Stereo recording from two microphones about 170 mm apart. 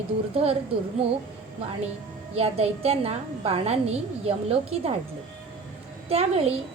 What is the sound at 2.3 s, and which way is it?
A woman's voice, 35° right (ahead or behind).